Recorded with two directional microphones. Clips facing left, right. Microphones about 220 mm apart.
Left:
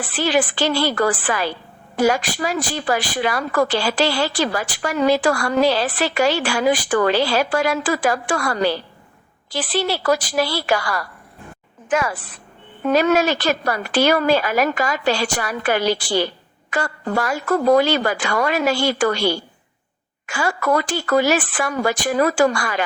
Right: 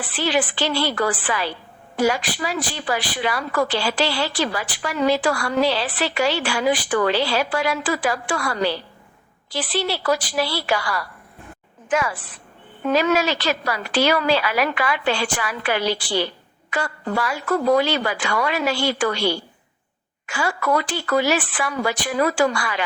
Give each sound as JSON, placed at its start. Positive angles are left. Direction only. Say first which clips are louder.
{"t": 0.0, "sound": "a woman's voice", "louder": "left 3 dB", "side_deg": 45}